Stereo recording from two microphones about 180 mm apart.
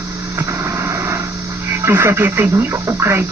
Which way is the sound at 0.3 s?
15° right (ahead or behind).